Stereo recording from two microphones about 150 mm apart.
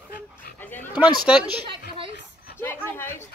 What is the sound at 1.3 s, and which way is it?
Speech, 5° right (ahead or behind).